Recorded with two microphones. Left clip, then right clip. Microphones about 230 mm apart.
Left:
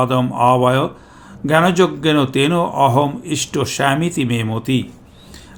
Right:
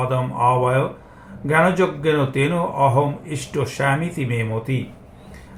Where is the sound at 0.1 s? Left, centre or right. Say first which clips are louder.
Left 4 dB; left.